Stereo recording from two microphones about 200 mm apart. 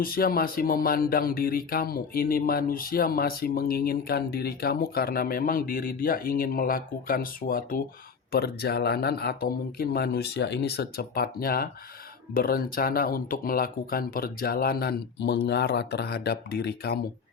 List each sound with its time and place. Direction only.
0.0 s speech: 50° left (ahead or behind)